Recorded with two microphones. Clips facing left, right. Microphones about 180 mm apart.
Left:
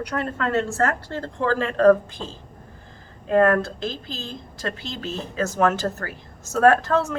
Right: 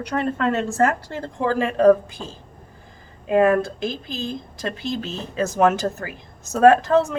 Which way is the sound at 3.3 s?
10° right (ahead or behind).